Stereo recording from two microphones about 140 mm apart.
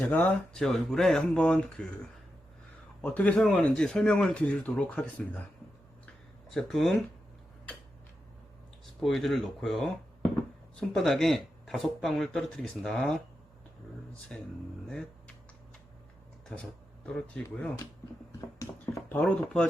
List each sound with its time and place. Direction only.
0.1 s speech: 10° left (ahead or behind)
3.0 s speech: 10° left (ahead or behind)
6.5 s speech: centre (ahead or behind)
9.0 s speech: centre (ahead or behind)
14.3 s speech: 5° left (ahead or behind)
17.1 s speech: 5° left (ahead or behind)
18.3 s speech: 20° left (ahead or behind)
19.1 s speech: 5° left (ahead or behind)